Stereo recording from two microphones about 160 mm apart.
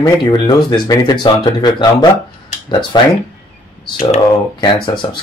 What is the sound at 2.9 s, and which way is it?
Speech, 25° left (ahead or behind).